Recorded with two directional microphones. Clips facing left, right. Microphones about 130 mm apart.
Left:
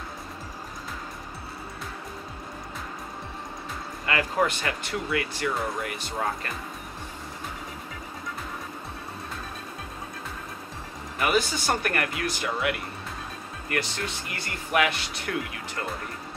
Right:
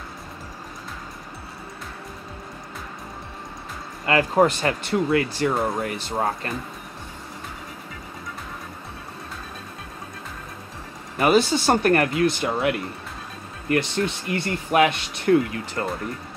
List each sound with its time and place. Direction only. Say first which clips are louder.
4.0 s speech: right 7 dB; 35° right (ahead or behind)
11.1 s speech: right 7 dB; 30° right (ahead or behind)
14.3 s speech: right 5 dB; 25° right (ahead or behind)